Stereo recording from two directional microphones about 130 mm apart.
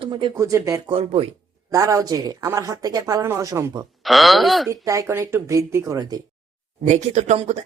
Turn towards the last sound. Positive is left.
turn(degrees=-55)  # may be behind; listen again after turning